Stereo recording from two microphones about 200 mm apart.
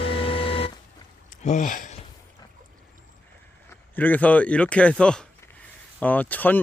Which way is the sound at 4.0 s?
10° left (ahead or behind).